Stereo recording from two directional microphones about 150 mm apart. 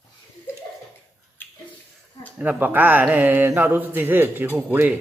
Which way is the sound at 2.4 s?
10° right (ahead or behind).